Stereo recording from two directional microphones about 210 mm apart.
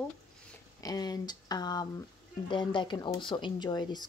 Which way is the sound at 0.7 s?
20° left (ahead or behind).